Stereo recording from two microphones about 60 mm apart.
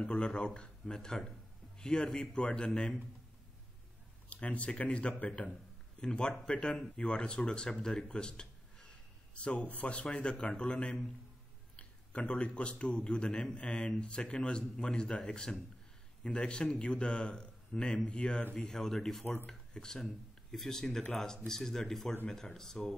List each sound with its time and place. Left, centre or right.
0.1 s a man's voice: centre
4.3 s a man's voice: left
18.4 s speech: left
18.7 s a man's voice: centre